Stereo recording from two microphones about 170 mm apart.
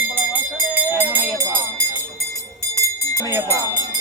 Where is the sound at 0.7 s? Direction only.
10° right (ahead or behind).